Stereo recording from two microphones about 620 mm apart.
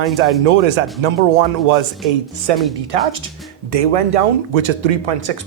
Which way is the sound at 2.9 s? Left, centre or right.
Right.